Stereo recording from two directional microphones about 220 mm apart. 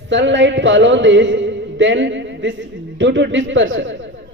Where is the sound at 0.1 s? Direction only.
55° right (ahead or behind).